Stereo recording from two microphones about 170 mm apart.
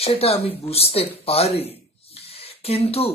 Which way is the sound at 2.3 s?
35° left (ahead or behind).